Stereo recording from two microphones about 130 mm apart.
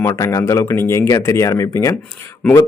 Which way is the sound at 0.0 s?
25° left (ahead or behind).